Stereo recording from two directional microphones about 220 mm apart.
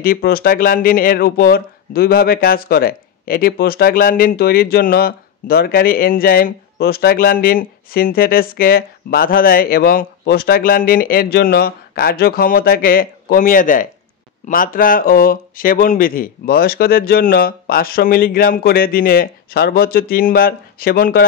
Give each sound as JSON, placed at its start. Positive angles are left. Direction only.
{"t": 0.0, "sound": "speech", "side_deg": 40}